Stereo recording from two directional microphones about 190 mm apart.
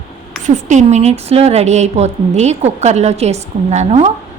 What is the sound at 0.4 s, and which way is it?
A woman's voice, 40° right (ahead or behind).